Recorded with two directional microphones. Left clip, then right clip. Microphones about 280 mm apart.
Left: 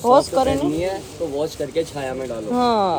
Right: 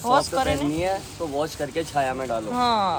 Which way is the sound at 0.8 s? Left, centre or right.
Right.